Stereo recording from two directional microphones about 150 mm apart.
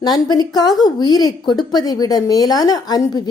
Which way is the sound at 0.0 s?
25° left (ahead or behind).